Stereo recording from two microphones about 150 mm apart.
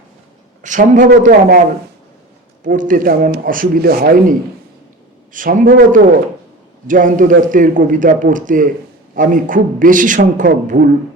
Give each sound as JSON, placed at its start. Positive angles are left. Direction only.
{"t": 0.6, "sound": "a man's voice", "side_deg": -55}
{"t": 2.6, "sound": "a man's voice", "side_deg": -60}